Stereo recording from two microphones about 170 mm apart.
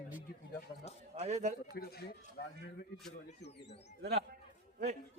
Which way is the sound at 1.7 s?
70° left (ahead or behind).